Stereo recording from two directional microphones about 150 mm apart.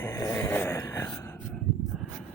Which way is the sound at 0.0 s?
20° left (ahead or behind).